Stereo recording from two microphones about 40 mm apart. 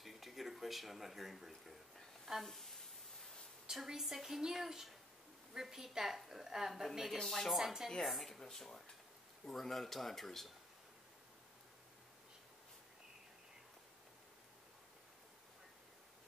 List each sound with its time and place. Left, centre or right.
0.0 s a sound: centre
3.7 s a woman's voice: centre
4.0 s a woman's voice: centre
7.2 s speech: centre
8.1 s speech: centre